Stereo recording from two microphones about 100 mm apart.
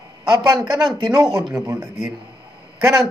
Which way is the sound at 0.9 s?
40° right (ahead or behind).